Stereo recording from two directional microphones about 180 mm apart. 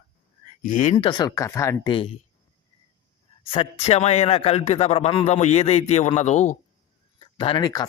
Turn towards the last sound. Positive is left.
turn(degrees=20)  # may be behind; listen again after turning